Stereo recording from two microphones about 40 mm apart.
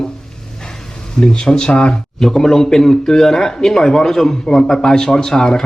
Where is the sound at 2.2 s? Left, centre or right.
Centre.